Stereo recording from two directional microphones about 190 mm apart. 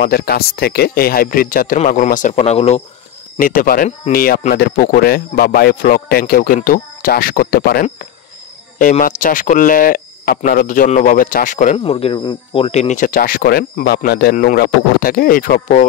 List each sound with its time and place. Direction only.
0.0 s a man's voice: 55° left (ahead or behind); by 2.8 s 35° left (ahead or behind)
3.3 s speech: 45° left (ahead or behind)
11.8 s speech: 30° left (ahead or behind); by 14.3 s 55° left (ahead or behind)
14.3 s speech: 45° left (ahead or behind)